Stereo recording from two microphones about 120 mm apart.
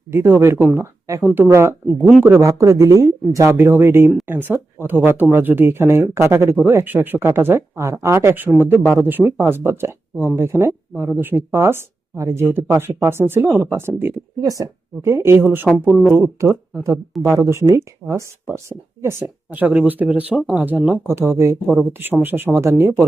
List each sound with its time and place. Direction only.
0.1 s speech: 20° right (ahead or behind)
2.0 s speech: centre (ahead or behind)
2.2 s speech: 25° right (ahead or behind)
19.2 s speech: 15° right (ahead or behind)